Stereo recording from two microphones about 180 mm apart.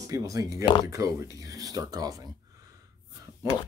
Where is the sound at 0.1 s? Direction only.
20° right (ahead or behind).